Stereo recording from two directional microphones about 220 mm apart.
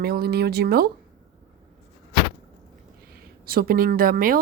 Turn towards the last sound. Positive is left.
turn(degrees=-40)  # may be behind; listen again after turning